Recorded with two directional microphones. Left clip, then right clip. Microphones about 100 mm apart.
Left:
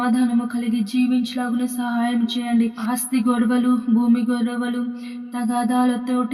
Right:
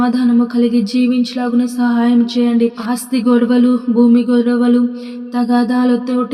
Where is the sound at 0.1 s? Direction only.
30° right (ahead or behind).